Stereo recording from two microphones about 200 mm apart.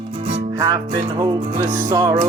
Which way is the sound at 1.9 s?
15° right (ahead or behind).